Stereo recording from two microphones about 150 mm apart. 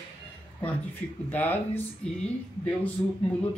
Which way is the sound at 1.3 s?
10° left (ahead or behind).